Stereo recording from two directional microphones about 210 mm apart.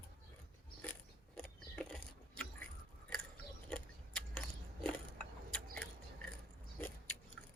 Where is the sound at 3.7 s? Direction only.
5° left (ahead or behind).